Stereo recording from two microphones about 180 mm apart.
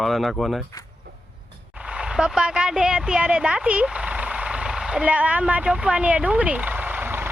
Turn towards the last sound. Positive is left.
turn(degrees=-10)  # may be behind; listen again after turning